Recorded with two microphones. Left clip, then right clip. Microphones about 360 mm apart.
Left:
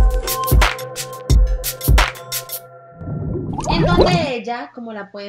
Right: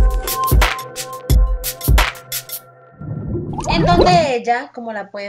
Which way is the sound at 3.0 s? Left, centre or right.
Centre.